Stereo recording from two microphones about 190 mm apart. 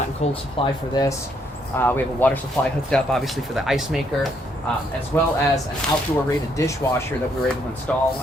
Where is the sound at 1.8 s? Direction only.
10° left (ahead or behind).